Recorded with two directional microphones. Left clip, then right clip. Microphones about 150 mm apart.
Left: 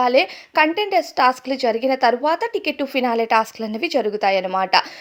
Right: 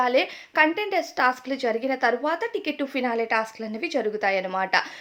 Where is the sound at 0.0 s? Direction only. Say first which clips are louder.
Left 5 dB; 35° left (ahead or behind).